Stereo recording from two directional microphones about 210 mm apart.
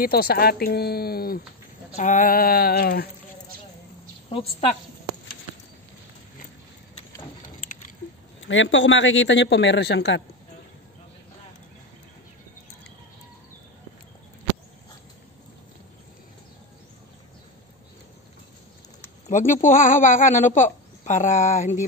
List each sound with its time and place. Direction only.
0.0 s speech: 45° left (ahead or behind)
4.3 s a woman's voice: 30° left (ahead or behind)
7.4 s a sound: 40° left (ahead or behind)
8.4 s a man's voice: 65° left (ahead or behind)
19.2 s speech: 35° left (ahead or behind)